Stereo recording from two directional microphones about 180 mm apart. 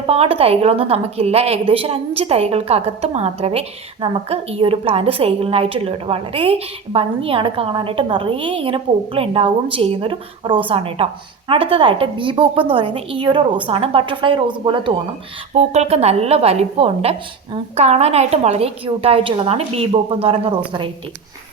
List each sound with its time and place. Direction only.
0.1 s a woman's voice: 35° right (ahead or behind)
15.5 s a woman's voice: 40° right (ahead or behind)